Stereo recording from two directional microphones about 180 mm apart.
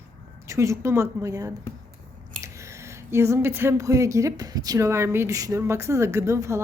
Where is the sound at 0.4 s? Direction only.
15° right (ahead or behind).